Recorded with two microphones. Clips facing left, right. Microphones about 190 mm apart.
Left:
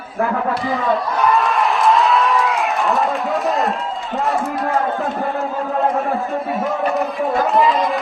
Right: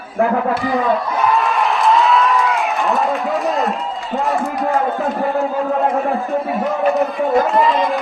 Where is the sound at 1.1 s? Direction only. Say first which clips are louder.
Even; centre (ahead or behind).